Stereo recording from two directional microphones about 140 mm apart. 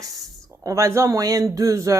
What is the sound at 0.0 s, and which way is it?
Speech, 25° right (ahead or behind).